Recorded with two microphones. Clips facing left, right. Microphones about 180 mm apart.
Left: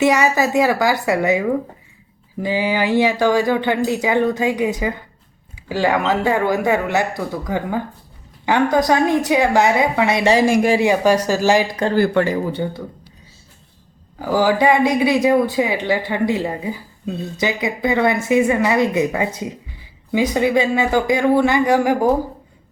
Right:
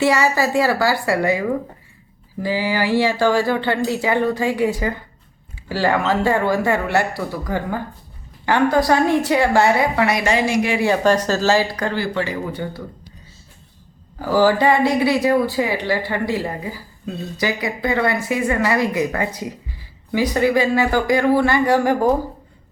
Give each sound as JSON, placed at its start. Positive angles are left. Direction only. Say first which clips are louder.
{"t": 0.0, "sound": "speech", "louder": "left 2 dB", "side_deg": 20}
{"t": 2.4, "sound": "speech", "louder": "left 1 dB", "side_deg": 20}
{"t": 10.3, "sound": "speech", "louder": "left 4 dB", "side_deg": 50}
{"t": 10.8, "sound": "speech", "louder": "left 1 dB", "side_deg": 15}
{"t": 11.9, "sound": "speech", "louder": "left 10 dB", "side_deg": 50}
{"t": 12.5, "sound": "speech", "louder": "left 4 dB", "side_deg": 30}
{"t": 14.2, "sound": "speech", "louder": "right 1 dB", "side_deg": 15}